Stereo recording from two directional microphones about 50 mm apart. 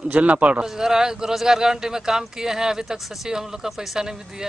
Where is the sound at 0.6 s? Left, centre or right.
Centre.